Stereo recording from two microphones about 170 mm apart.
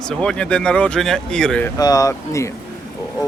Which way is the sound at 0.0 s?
5° left (ahead or behind).